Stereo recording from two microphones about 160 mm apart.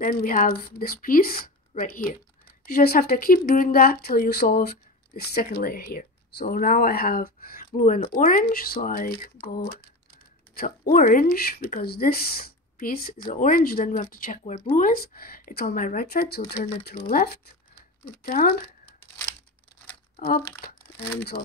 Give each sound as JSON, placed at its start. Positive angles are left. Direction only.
{"t": 0.0, "sound": "speech", "side_deg": 60}
{"t": 9.6, "sound": "speech", "side_deg": 80}
{"t": 17.1, "sound": "speech", "side_deg": 70}
{"t": 20.2, "sound": "crumpling", "side_deg": 70}